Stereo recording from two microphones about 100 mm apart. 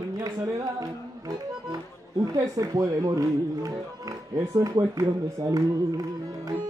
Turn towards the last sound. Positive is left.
turn(degrees=-40)  # may be behind; listen again after turning